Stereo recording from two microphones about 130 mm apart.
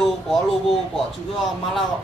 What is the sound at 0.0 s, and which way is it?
Speech, centre (ahead or behind).